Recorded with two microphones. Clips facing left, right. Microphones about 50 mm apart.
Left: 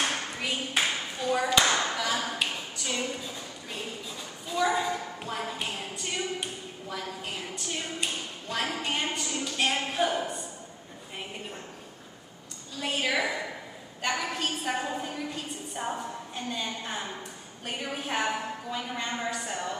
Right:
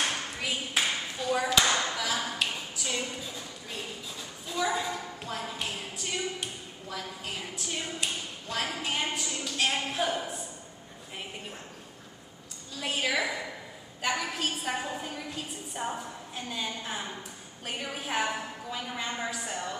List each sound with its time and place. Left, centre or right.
0.1 s clapping: centre
3.7 s a sound: centre
12.7 s a woman's voice: centre